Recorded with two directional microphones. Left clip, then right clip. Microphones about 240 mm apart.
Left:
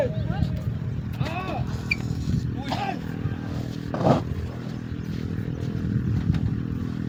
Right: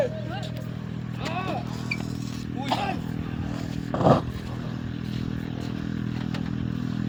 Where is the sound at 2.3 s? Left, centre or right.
Right.